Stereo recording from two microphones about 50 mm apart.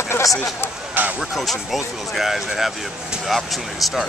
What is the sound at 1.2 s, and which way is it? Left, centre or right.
Speech, centre.